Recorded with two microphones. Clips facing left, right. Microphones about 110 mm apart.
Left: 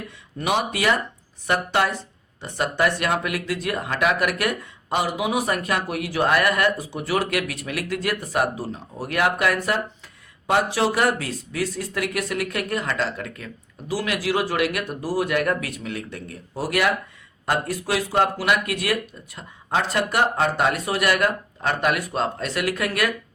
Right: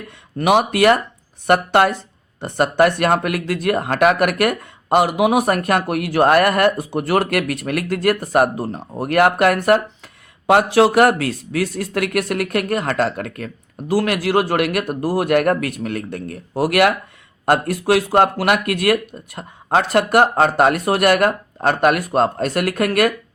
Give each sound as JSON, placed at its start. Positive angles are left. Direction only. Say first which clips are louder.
{"t": 0.3, "sound": "speech", "louder": "right 8 dB", "side_deg": -60}